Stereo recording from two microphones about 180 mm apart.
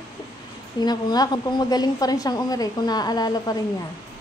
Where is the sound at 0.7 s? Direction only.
25° left (ahead or behind).